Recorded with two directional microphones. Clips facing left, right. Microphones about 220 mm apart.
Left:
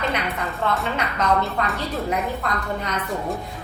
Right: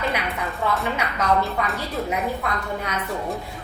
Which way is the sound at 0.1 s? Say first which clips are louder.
Left 1 dB; centre (ahead or behind).